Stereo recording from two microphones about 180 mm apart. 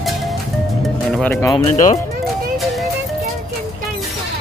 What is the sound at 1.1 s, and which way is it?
Music, 10° left (ahead or behind).